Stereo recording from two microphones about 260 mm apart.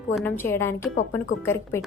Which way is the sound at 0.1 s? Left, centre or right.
Centre.